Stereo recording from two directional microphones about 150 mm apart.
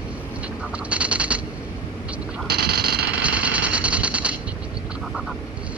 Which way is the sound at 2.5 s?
90° right.